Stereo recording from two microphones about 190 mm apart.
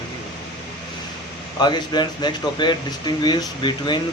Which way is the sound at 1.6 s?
20° left (ahead or behind).